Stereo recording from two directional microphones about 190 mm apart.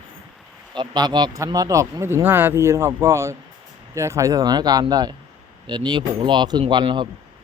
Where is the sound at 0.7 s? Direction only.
25° right (ahead or behind).